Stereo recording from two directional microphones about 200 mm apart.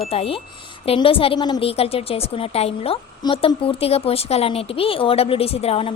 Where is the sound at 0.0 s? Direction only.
30° left (ahead or behind).